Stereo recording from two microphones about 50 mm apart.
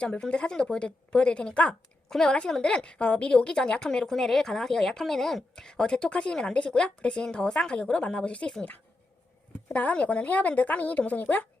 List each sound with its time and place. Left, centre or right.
0.0 s a woman's voice: left
2.0 s a woman's voice: centre
9.6 s a woman's voice: left